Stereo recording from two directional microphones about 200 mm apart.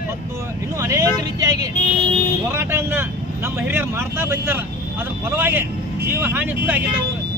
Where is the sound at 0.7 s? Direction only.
15° right (ahead or behind).